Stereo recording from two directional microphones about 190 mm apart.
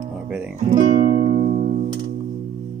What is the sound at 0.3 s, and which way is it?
Speech, 5° right (ahead or behind).